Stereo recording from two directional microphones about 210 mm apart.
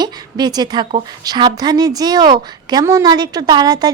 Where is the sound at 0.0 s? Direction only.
20° right (ahead or behind).